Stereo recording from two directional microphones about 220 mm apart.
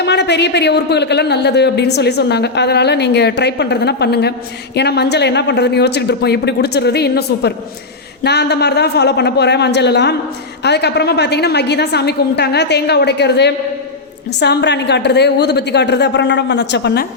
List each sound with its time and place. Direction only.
0.0 s a man's voice: 50° left (ahead or behind)